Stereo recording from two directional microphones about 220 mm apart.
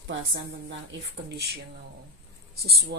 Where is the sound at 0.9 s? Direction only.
55° right (ahead or behind).